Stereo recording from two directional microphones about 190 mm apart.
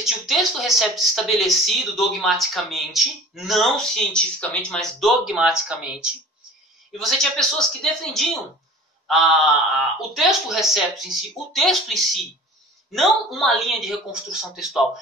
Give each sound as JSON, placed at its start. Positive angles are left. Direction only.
{"t": 0.0, "sound": "speech", "side_deg": 0}